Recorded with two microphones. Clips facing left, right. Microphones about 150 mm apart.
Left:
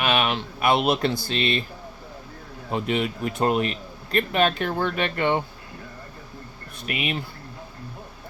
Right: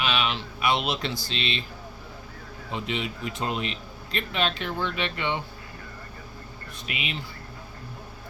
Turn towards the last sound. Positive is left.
turn(degrees=50)  # may be behind; listen again after turning